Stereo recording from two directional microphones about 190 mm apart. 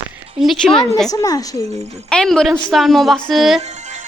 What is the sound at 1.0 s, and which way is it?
Speech, 20° left (ahead or behind).